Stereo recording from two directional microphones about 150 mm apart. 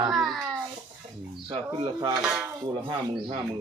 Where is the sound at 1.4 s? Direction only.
30° right (ahead or behind).